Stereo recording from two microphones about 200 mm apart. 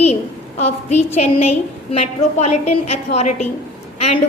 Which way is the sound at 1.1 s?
30° left (ahead or behind).